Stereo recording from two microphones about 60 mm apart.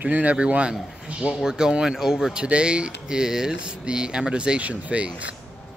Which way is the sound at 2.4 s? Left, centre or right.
Centre.